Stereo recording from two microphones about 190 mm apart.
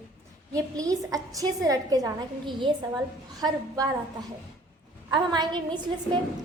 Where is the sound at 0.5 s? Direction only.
20° right (ahead or behind).